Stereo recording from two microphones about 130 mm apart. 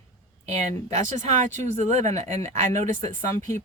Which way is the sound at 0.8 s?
65° right (ahead or behind).